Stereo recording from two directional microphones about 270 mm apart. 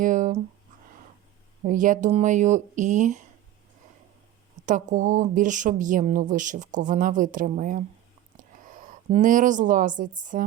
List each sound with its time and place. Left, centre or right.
0.0 s a sound: right
1.6 s speech: right
4.6 s speech: right
9.0 s speech: right